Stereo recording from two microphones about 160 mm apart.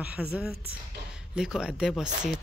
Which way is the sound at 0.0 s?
10° right (ahead or behind).